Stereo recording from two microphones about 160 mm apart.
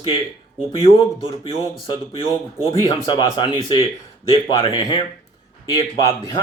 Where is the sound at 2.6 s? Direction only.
30° left (ahead or behind).